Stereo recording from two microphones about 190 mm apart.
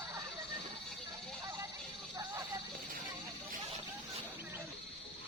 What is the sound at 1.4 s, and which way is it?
Sheep, 20° right (ahead or behind).